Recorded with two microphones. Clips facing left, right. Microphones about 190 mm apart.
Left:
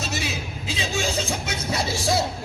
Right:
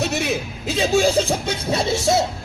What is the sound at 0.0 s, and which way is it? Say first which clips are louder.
Speech: right 7 dB; 60° right (ahead or behind).